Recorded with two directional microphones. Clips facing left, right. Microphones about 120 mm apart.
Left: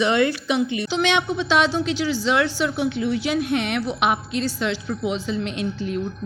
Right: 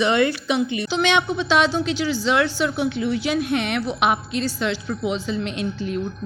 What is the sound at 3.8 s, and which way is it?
Speech, 50° right (ahead or behind).